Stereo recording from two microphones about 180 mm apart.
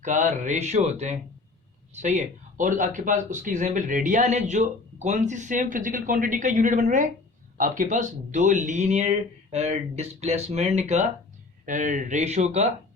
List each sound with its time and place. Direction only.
0.0 s speech: 45° right (ahead or behind)